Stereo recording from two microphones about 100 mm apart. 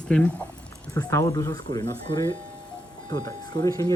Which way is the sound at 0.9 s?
30° left (ahead or behind).